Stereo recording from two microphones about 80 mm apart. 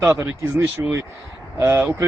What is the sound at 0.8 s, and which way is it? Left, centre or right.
Speech, right.